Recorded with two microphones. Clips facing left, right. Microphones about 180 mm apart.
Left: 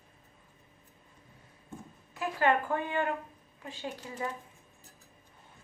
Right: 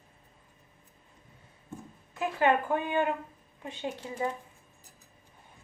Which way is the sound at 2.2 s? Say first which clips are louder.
Right 2 dB; 20° right (ahead or behind).